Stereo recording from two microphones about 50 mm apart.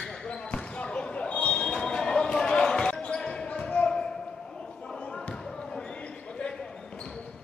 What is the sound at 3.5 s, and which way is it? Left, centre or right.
Basketball bounce, left.